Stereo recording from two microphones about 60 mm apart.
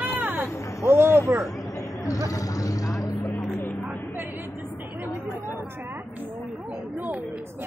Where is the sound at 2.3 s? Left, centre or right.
Left.